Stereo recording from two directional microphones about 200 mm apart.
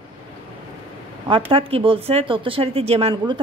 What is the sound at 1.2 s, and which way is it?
Speech, 25° right (ahead or behind).